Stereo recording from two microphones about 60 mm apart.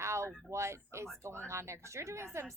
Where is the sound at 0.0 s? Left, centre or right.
Right.